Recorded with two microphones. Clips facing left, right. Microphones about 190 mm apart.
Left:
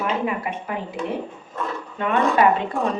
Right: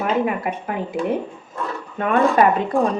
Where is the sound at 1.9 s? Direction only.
45° right (ahead or behind).